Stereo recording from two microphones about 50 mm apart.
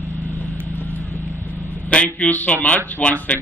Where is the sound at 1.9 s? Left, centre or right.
Left.